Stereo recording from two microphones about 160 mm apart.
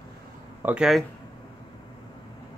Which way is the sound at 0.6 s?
5° right (ahead or behind).